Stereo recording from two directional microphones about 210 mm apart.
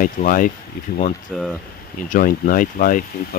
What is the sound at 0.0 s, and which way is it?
Speech, 40° left (ahead or behind).